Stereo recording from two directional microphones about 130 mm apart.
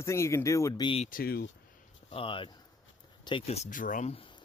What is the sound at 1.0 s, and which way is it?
Speech, 90° left.